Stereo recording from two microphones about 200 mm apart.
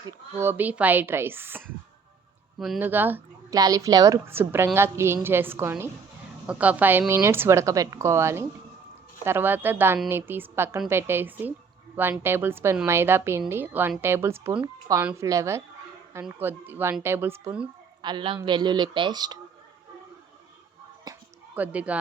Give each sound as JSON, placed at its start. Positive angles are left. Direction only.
{"t": 0.0, "sound": "speech", "side_deg": -10}
{"t": 18.0, "sound": "speech", "side_deg": -25}
{"t": 21.5, "sound": "speech", "side_deg": -5}